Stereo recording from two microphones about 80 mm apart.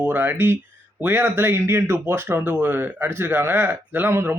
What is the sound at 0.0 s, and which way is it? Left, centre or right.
Speech, right.